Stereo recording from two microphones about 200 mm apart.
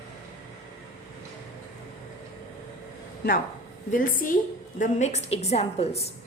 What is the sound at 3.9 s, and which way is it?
A woman's voice, 45° left (ahead or behind).